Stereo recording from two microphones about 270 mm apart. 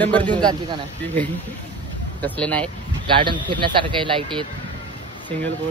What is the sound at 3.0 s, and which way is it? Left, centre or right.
Speech, centre.